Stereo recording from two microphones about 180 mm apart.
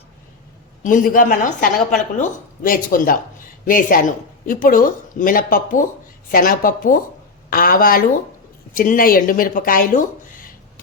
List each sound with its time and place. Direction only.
0.8 s speech: 45° left (ahead or behind)